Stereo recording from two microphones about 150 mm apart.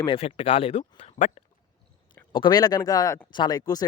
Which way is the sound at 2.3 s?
30° left (ahead or behind).